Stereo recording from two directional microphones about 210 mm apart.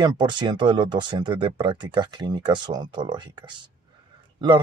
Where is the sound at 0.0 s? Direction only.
20° right (ahead or behind).